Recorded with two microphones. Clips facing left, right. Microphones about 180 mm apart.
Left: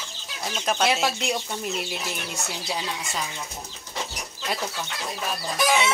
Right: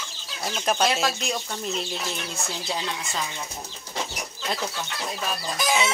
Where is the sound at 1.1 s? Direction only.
20° left (ahead or behind).